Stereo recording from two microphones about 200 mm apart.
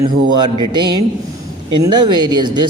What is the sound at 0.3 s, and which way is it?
A man's voice, 20° right (ahead or behind).